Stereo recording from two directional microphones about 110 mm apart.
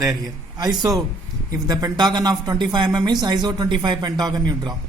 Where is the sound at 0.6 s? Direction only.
35° right (ahead or behind).